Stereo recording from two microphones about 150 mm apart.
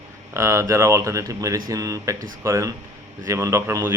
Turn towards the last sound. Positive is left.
turn(degrees=-15)  # may be behind; listen again after turning